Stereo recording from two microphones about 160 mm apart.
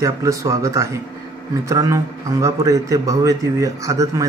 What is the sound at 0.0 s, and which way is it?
A man's voice, 20° right (ahead or behind).